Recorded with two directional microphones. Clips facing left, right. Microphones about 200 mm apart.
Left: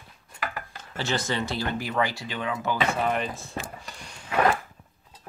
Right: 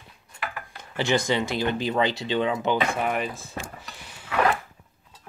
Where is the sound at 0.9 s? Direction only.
15° right (ahead or behind).